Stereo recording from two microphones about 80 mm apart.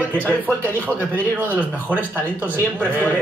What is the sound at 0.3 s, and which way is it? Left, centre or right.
Speech, right.